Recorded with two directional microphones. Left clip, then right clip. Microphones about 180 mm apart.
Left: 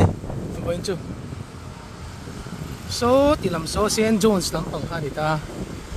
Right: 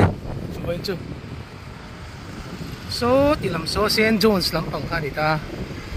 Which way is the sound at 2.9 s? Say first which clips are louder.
Left 1 dB; 5° left (ahead or behind).